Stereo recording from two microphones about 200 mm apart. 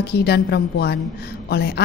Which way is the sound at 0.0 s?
55° left (ahead or behind).